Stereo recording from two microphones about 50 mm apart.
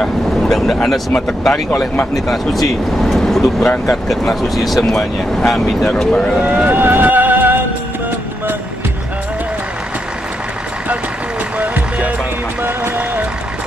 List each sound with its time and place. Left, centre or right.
0.0 s vehicle: centre
1.1 s speech: centre
2.1 s speech: centre
6.7 s music: right
11.5 s music: right